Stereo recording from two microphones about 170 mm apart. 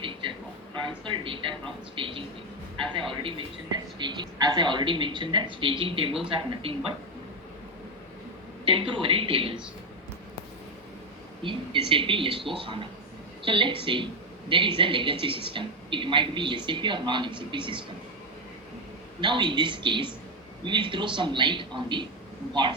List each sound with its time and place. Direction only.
0.0 s a sound: 30° right (ahead or behind)
0.9 s speech: 30° right (ahead or behind)
2.0 s a sound: 30° right (ahead or behind)
3.1 s a man's voice: 30° right (ahead or behind)
8.6 s a man's voice: 30° right (ahead or behind)
11.4 s a man's voice: 30° right (ahead or behind)
19.2 s a woman's voice: 30° right (ahead or behind)